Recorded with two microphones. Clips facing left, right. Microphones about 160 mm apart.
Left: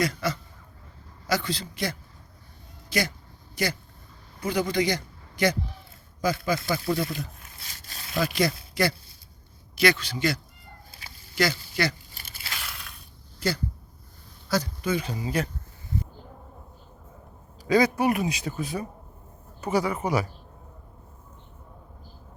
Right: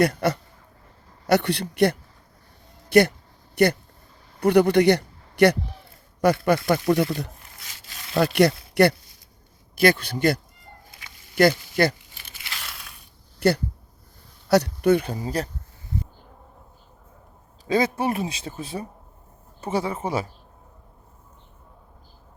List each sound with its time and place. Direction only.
0.0 s a man's voice: 60° right (ahead or behind)
6.7 s speech: 50° right (ahead or behind)
7.7 s zipper: 40° left (ahead or behind)
8.1 s a man's voice: 65° right (ahead or behind)
9.7 s a man's voice: 50° right (ahead or behind)
12.1 s tearing: 40° left (ahead or behind)
13.4 s speech: 65° right (ahead or behind); by 15.4 s 40° right (ahead or behind)
17.7 s a man's voice: 25° right (ahead or behind)